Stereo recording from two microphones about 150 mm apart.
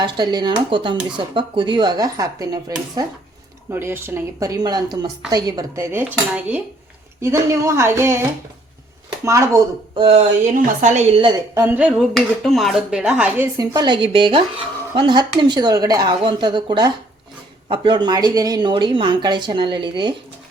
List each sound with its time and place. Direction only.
0.0 s a woman's voice: 30° right (ahead or behind)
9.2 s speech: 20° right (ahead or behind)
9.9 s a woman's voice: 35° right (ahead or behind)
10.4 s a woman's voice: 60° right (ahead or behind)
11.5 s speech: 10° right (ahead or behind)
13.7 s a woman's voice: 30° right (ahead or behind)